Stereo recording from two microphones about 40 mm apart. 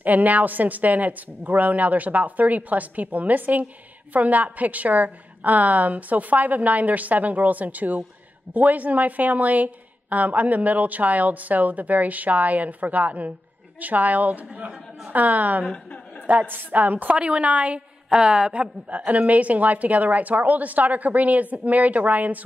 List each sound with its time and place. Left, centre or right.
0.0 s a woman's voice: right
17.2 s a woman's voice: right
18.1 s a woman's voice: right
18.9 s a woman's voice: right